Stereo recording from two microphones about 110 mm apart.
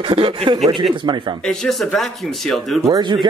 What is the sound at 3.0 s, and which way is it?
Speech, 45° right (ahead or behind).